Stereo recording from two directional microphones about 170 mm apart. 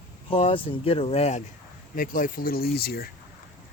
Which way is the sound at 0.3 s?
35° left (ahead or behind).